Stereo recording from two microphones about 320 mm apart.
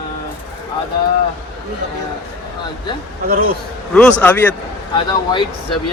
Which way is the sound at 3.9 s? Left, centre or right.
Centre.